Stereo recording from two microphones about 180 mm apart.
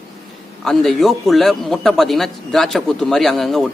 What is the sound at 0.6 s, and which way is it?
Speech, centre (ahead or behind).